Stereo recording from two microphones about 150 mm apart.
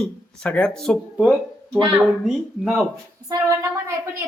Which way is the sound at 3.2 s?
20° right (ahead or behind).